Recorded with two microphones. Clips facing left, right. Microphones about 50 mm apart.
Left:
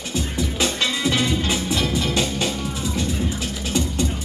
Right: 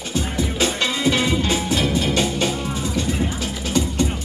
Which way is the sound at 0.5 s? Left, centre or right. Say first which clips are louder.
Right 1 dB; right.